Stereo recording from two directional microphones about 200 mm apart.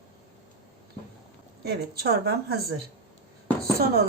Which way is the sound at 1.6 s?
50° right (ahead or behind).